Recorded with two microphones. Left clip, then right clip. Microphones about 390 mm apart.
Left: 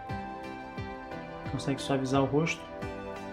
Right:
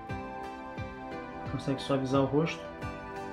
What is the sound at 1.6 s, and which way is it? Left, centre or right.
Speech, centre.